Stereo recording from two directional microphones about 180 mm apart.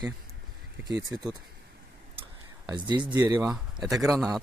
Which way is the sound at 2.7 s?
25° right (ahead or behind).